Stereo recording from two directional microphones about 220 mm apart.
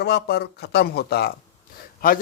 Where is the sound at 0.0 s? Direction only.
50° left (ahead or behind).